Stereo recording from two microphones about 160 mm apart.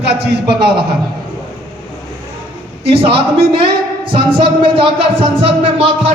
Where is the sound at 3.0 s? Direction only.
35° right (ahead or behind).